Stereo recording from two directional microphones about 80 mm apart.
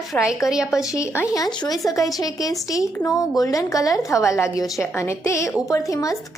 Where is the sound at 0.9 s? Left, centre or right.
Left.